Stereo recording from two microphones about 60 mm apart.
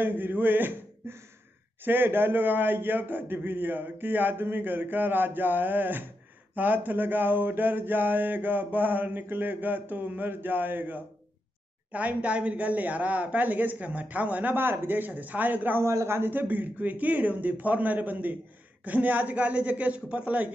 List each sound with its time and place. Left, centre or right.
0.0 s mantra: right
11.9 s speech: right
14.5 s mantra: right
15.8 s a man's voice: right
16.2 s speech: right